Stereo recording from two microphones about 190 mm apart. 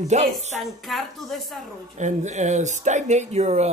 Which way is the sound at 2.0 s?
40° right (ahead or behind).